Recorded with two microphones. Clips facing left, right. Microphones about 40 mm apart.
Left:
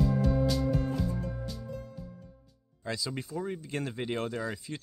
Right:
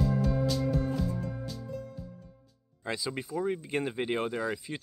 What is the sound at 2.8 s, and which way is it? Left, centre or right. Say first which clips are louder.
Speech: right 1 dB; centre.